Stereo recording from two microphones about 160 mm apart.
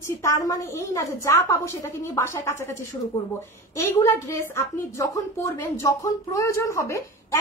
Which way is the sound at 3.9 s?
15° left (ahead or behind).